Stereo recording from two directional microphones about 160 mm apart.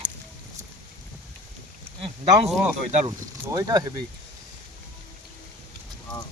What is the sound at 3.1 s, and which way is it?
Speech, 20° right (ahead or behind).